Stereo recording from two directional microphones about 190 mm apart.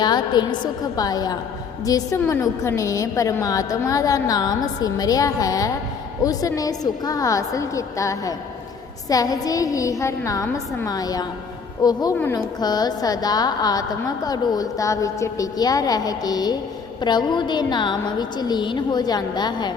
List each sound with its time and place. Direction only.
0.0 s a woman's voice: 20° left (ahead or behind)